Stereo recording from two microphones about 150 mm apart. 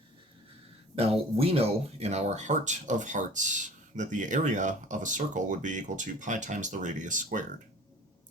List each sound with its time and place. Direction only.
0.9 s speech: 40° right (ahead or behind); by 7.4 s 55° right (ahead or behind)